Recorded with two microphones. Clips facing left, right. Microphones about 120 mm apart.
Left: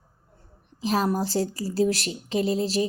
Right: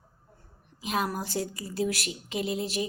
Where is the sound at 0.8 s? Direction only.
35° left (ahead or behind).